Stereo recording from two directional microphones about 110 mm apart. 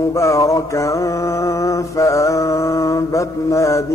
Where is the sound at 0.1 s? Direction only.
25° left (ahead or behind).